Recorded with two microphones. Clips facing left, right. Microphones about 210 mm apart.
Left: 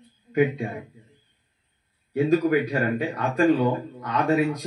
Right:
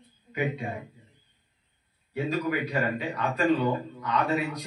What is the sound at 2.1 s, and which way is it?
Speech, 45° left (ahead or behind).